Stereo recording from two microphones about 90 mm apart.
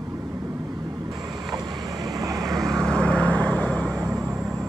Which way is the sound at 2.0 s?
40° right (ahead or behind).